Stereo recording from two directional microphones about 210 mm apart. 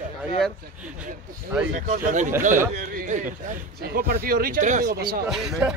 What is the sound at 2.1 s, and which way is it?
A man's voice, 35° right (ahead or behind).